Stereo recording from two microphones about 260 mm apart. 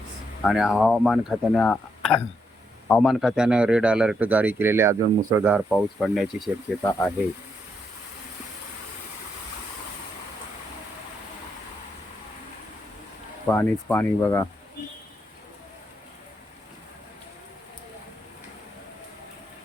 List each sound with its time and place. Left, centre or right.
0.4 s a man's voice: centre
13.5 s speech: centre